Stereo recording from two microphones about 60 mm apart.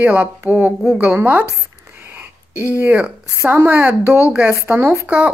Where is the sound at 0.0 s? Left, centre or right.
Right.